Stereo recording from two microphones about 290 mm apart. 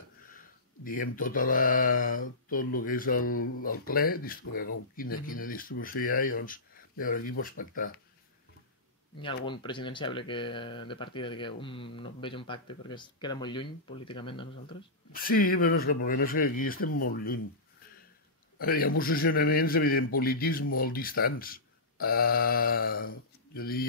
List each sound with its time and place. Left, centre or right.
0.8 s speech: left
9.2 s speech: centre
15.1 s speech: left
18.6 s speech: left